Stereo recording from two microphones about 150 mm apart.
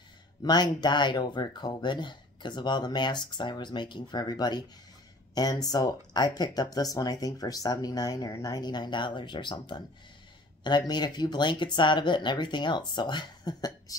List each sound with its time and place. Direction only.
0.4 s speech: 30° left (ahead or behind)